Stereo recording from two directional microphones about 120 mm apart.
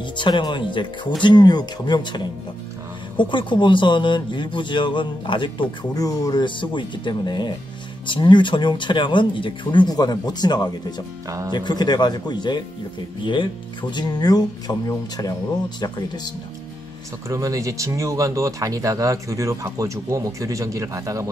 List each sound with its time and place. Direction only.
0.2 s speech: 40° left (ahead or behind)
11.2 s speech: 30° right (ahead or behind)
11.5 s speech: 35° left (ahead or behind)
17.3 s speech: 30° right (ahead or behind)